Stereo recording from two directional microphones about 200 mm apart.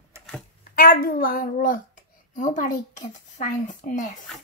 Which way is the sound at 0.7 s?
45° left (ahead or behind).